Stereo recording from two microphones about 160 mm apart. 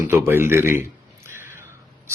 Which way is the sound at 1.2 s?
15° right (ahead or behind).